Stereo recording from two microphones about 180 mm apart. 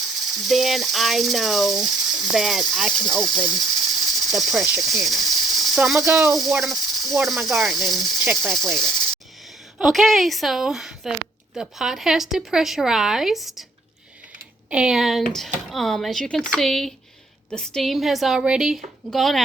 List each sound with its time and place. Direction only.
0.2 s speech: centre (ahead or behind)
14.7 s speech: 5° right (ahead or behind)